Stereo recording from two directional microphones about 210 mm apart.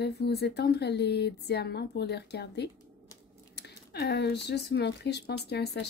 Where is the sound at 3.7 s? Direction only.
50° left (ahead or behind).